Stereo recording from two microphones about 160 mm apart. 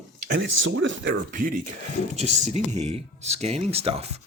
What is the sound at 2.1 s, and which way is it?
Speech, 45° right (ahead or behind).